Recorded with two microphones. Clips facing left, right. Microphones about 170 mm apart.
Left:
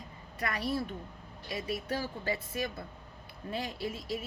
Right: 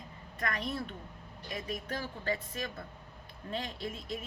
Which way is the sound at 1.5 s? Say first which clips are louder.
Left 3 dB; 10° left (ahead or behind).